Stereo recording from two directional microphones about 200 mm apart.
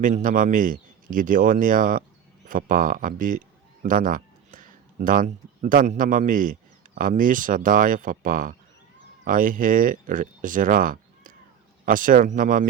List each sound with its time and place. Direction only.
0.0 s speech: 40° right (ahead or behind)